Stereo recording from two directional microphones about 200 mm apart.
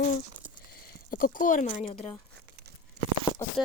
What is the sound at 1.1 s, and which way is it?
Speech, 45° left (ahead or behind).